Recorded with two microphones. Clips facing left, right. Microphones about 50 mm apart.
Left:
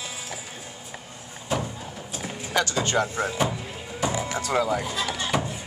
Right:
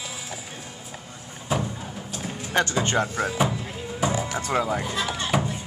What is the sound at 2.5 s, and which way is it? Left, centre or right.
Speech, right.